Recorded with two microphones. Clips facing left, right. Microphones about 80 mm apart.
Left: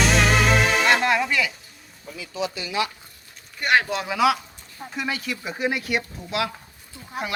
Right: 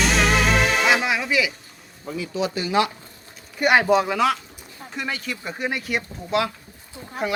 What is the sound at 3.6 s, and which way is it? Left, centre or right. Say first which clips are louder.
Speech: right 5 dB; centre.